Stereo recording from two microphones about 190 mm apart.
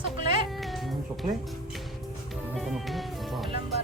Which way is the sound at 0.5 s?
Centre (ahead or behind).